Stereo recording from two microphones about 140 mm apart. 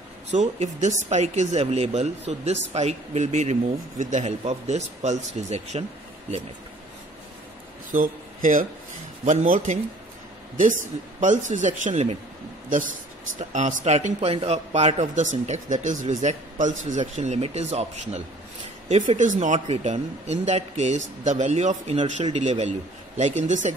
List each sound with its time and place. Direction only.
0.3 s speech: 55° right (ahead or behind)
7.9 s speech: 70° right (ahead or behind)
11.1 s a man's voice: 65° right (ahead or behind)
13.4 s a man's voice: 65° right (ahead or behind)
19.0 s a man's voice: 65° right (ahead or behind)